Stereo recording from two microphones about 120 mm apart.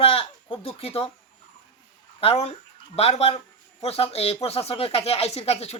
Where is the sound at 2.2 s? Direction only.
55° left (ahead or behind).